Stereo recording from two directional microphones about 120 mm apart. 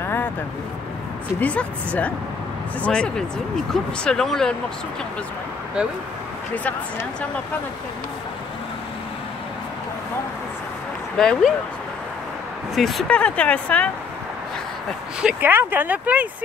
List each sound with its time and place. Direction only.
0.0 s vehicle: 20° left (ahead or behind)
1.4 s speech: 10° left (ahead or behind)
6.5 s speech: 10° left (ahead or behind)
11.1 s speech: 5° left (ahead or behind)
12.7 s speech: centre (ahead or behind)
13.1 s speech: 10° left (ahead or behind)
15.4 s speech: 15° right (ahead or behind)